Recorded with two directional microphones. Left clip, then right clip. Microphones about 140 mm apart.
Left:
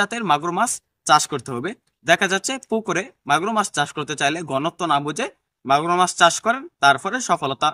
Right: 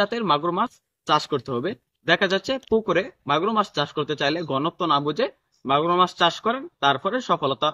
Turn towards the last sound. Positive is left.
turn(degrees=30)  # may be behind; listen again after turning